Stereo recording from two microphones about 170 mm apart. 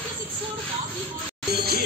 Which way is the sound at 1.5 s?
65° right (ahead or behind).